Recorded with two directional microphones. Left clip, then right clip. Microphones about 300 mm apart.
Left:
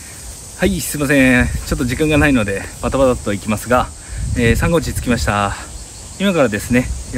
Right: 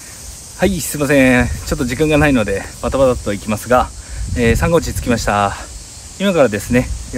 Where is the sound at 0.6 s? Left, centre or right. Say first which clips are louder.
Right 2 dB; centre.